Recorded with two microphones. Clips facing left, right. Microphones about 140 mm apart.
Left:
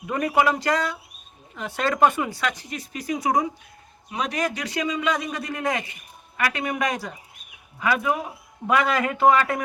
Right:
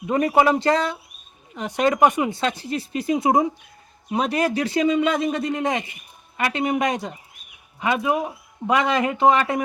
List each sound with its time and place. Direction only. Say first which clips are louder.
0.1 s speech: right 4 dB; 25° right (ahead or behind)